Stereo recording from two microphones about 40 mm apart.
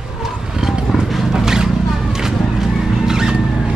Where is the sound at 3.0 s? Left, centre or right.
Centre.